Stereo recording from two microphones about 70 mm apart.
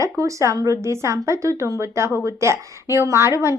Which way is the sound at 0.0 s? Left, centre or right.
Right.